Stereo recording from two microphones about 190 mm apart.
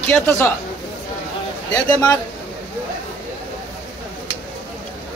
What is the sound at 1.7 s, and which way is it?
Speech, 20° left (ahead or behind).